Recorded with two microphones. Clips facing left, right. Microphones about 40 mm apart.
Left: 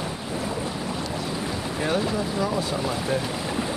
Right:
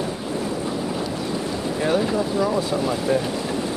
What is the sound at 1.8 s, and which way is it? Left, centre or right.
Speech, centre.